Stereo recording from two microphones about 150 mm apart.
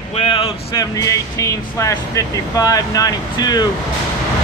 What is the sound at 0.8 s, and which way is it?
Speech, 20° left (ahead or behind).